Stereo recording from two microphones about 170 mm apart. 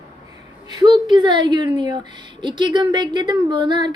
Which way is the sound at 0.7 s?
25° right (ahead or behind).